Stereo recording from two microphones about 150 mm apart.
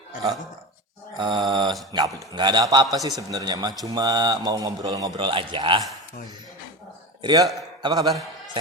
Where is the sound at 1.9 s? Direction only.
30° right (ahead or behind).